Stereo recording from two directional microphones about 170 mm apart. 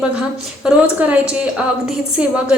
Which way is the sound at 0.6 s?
10° right (ahead or behind).